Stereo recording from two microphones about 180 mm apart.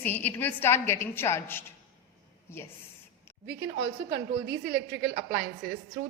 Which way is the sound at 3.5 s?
75° right (ahead or behind).